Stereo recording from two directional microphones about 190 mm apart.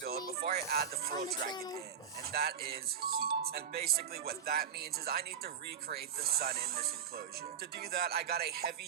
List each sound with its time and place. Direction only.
0.4 s speech: 55° right (ahead or behind)
1.5 s speech: 20° left (ahead or behind)
2.2 s speech: 55° right (ahead or behind)